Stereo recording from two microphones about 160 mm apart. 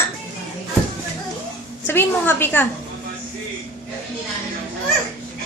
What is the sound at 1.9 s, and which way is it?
Speech, 15° left (ahead or behind).